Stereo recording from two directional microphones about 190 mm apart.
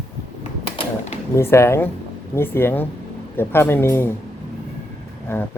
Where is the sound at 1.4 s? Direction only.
15° left (ahead or behind).